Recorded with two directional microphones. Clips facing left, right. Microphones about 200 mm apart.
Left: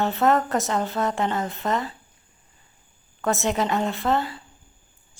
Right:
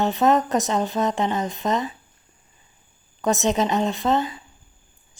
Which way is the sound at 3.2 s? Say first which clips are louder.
Right 3 dB; 20° right (ahead or behind).